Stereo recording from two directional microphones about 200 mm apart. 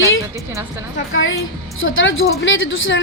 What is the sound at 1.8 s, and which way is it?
A woman's voice, 75° left (ahead or behind).